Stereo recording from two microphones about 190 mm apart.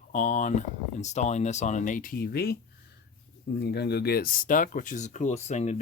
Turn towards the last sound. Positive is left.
turn(degrees=35)  # may be behind; listen again after turning